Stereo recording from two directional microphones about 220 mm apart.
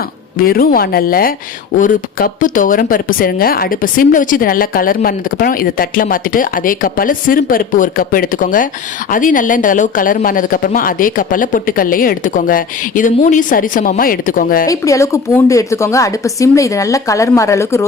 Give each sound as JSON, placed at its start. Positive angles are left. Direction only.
{"t": 0.3, "sound": "a woman's voice", "side_deg": 45}
{"t": 14.7, "sound": "a woman's voice", "side_deg": 15}